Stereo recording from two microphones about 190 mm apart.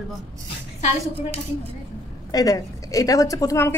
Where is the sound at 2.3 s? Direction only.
20° left (ahead or behind).